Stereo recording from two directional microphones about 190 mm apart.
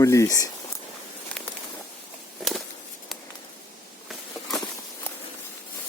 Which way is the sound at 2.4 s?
Centre (ahead or behind).